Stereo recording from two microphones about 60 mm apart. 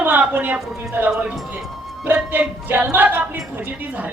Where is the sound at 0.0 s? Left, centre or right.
Right.